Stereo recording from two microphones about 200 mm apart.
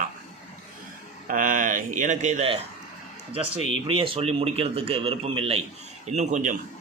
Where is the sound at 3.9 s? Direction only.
25° right (ahead or behind).